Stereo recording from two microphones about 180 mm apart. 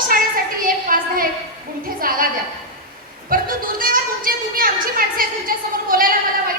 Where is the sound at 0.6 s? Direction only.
50° right (ahead or behind).